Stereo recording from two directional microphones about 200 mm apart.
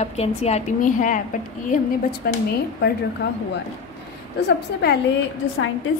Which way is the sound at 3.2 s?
60° left (ahead or behind).